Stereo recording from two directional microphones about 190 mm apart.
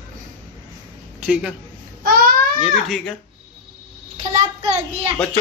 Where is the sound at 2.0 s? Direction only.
50° right (ahead or behind).